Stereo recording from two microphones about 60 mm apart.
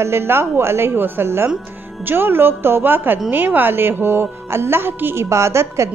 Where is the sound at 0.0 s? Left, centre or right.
Right.